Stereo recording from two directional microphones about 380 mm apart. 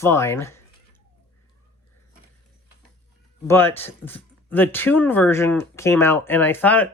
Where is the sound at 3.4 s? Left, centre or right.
Centre.